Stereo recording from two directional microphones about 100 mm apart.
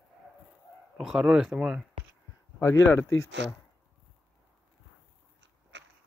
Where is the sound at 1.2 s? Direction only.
5° right (ahead or behind).